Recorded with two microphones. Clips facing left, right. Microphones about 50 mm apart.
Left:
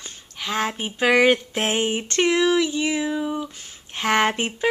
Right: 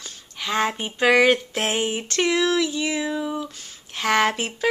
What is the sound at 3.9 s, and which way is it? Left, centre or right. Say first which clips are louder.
Speech: even; centre.